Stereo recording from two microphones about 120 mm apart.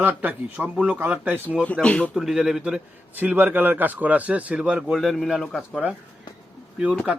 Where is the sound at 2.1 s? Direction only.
5° right (ahead or behind).